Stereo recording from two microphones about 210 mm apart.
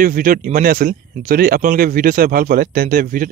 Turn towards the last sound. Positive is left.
turn(degrees=-40)  # may be behind; listen again after turning